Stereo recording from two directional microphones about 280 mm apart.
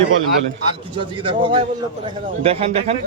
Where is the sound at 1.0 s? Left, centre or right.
Centre.